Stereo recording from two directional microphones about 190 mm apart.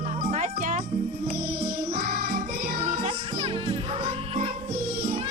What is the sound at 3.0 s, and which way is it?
Music, 30° right (ahead or behind).